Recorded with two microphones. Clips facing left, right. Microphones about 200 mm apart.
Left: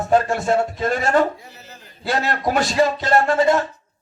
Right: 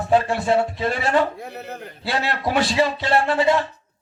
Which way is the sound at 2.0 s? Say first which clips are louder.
Left 2 dB; 45° left (ahead or behind).